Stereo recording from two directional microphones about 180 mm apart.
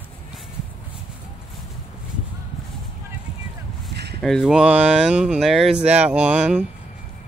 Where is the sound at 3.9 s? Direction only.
65° right (ahead or behind).